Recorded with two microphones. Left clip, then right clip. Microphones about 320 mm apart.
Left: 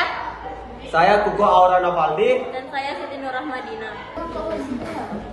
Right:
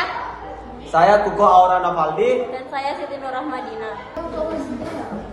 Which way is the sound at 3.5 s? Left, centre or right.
Centre.